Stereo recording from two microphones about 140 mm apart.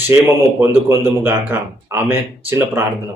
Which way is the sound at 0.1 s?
15° right (ahead or behind).